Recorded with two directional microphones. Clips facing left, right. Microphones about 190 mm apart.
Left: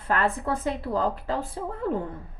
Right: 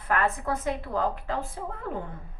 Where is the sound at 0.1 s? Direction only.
30° left (ahead or behind).